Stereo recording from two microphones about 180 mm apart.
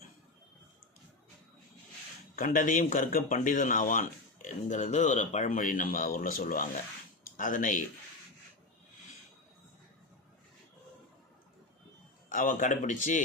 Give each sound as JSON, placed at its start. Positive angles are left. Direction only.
{"t": 2.3, "sound": "speech", "side_deg": 50}
{"t": 12.3, "sound": "speech", "side_deg": 45}